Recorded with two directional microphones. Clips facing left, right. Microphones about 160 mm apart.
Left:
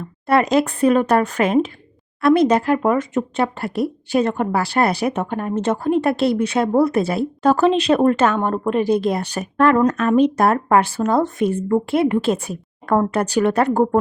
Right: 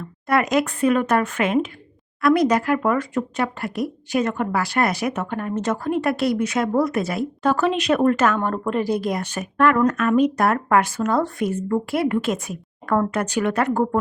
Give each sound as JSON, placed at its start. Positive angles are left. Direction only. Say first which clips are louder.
{"t": 0.3, "sound": "speech", "louder": "left 3 dB", "side_deg": 30}